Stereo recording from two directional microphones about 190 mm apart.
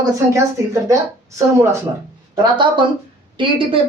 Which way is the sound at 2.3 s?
25° right (ahead or behind).